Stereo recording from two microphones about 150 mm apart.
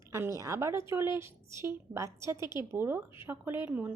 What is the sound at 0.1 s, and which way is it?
A woman's voice, 20° right (ahead or behind).